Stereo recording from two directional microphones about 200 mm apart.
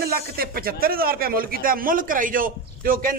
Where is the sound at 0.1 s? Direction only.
50° right (ahead or behind).